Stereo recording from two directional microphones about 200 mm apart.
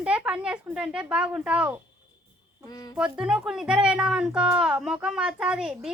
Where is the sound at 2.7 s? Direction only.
20° left (ahead or behind).